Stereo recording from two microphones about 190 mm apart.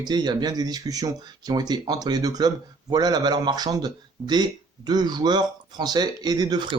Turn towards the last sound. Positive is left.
turn(degrees=-20)  # may be behind; listen again after turning